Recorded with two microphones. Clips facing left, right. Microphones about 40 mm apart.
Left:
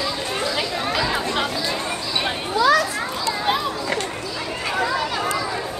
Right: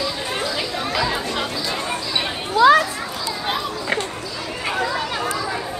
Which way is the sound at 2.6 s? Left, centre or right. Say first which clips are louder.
Right 4 dB; right.